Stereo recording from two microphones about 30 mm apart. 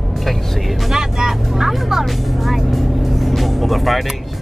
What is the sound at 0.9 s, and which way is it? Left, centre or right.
Speech, centre.